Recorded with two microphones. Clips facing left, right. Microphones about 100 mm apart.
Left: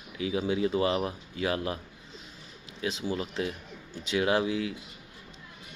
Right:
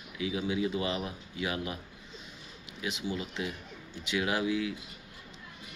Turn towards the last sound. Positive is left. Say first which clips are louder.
# left 3 dB
turn(degrees=35)  # may be behind; listen again after turning